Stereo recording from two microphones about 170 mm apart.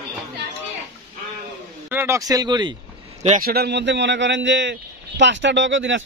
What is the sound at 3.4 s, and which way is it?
A man's voice, 70° right (ahead or behind).